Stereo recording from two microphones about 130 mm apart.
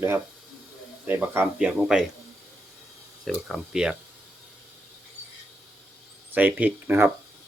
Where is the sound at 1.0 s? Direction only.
15° right (ahead or behind).